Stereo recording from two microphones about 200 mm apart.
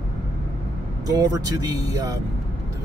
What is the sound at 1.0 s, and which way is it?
Speech, 20° right (ahead or behind).